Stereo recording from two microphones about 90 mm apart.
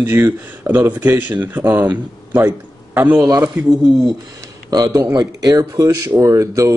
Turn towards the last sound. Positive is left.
turn(degrees=-35)  # may be behind; listen again after turning